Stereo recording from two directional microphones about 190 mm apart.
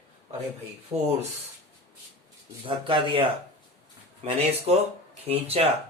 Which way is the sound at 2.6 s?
25° right (ahead or behind).